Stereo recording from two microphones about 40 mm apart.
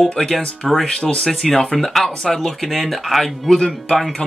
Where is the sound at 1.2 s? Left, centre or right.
Centre.